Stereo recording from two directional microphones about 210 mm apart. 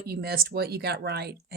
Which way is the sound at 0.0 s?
50° right (ahead or behind).